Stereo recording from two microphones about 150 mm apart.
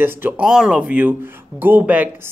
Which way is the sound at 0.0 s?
15° right (ahead or behind).